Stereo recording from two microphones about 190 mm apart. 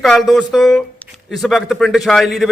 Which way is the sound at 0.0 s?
Centre (ahead or behind).